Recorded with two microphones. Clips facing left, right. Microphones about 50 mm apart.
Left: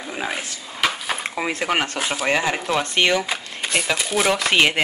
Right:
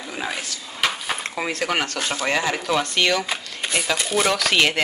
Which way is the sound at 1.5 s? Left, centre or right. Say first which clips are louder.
Left 1 dB; centre.